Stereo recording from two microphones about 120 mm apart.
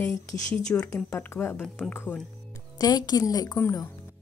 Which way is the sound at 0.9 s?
10° left (ahead or behind).